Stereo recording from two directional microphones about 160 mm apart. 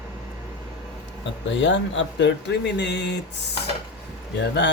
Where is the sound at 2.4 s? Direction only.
90° left.